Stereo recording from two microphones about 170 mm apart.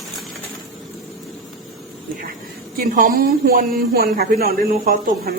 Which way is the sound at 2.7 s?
60° right (ahead or behind).